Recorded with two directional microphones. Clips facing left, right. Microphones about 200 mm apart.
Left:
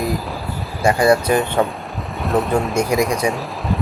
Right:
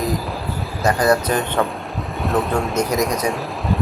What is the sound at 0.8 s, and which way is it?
Speech, 10° left (ahead or behind).